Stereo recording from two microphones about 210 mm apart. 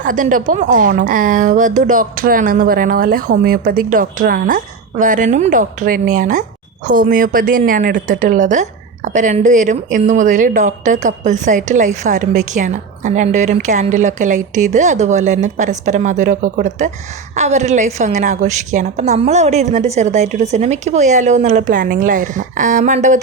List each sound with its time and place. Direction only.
0.0 s speech: 40° right (ahead or behind)